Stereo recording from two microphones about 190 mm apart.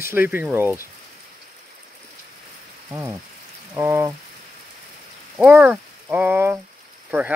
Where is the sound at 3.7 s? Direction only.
10° right (ahead or behind).